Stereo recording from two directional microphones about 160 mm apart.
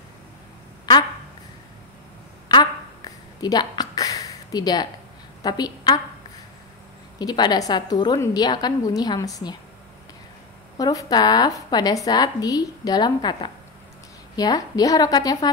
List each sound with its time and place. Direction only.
2.4 s a sound: 25° left (ahead or behind)
5.4 s a woman's voice: 25° left (ahead or behind)
7.2 s a woman's voice: 25° left (ahead or behind)
10.8 s a woman's voice: 25° left (ahead or behind)